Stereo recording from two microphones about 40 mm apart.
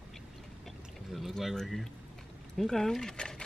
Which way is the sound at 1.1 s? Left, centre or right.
Centre.